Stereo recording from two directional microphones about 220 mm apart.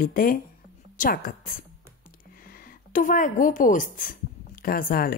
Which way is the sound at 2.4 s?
40° left (ahead or behind).